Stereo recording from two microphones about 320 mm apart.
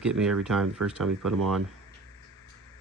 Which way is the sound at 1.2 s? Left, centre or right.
Right.